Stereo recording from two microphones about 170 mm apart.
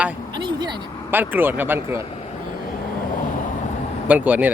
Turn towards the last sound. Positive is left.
turn(degrees=-10)  # may be behind; listen again after turning